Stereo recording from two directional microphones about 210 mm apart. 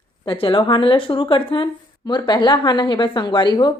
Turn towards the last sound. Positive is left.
turn(degrees=20)  # may be behind; listen again after turning